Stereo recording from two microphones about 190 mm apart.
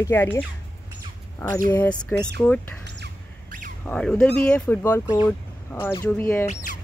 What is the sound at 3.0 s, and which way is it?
Squawk, 45° right (ahead or behind).